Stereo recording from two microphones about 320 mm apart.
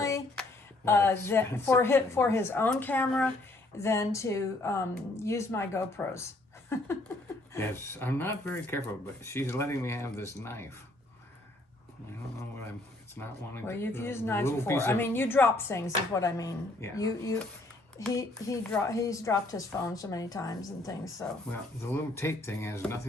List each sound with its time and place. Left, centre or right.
0.0 s a sound: centre
0.9 s speech: centre
13.1 s speech: centre